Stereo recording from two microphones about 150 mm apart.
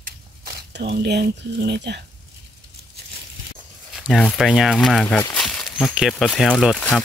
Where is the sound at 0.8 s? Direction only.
90° right.